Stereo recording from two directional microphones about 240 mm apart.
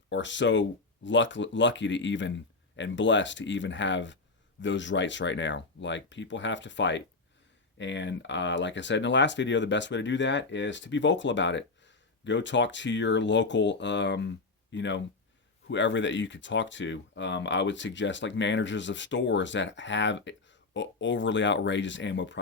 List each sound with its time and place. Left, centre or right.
0.1 s speech: left